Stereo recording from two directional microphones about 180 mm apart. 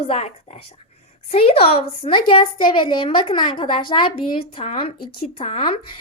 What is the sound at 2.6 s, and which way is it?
Child singing, 25° left (ahead or behind).